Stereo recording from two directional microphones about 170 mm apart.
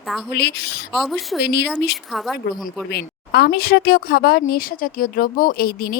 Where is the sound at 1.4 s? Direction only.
75° left (ahead or behind).